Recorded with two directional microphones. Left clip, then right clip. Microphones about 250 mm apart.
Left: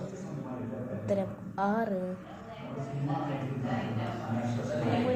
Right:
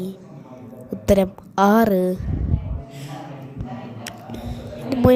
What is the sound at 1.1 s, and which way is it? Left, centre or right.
Speech, right.